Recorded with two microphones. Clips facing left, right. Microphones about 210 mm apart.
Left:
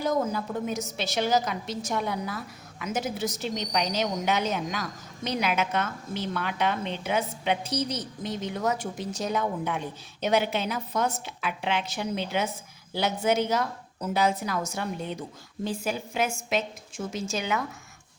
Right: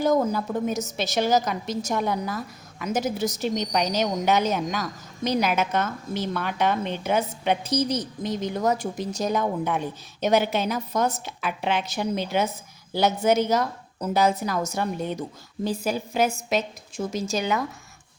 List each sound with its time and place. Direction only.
0.0 s a woman's voice: 45° right (ahead or behind)